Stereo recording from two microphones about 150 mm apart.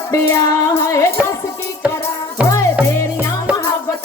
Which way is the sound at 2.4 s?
20° left (ahead or behind).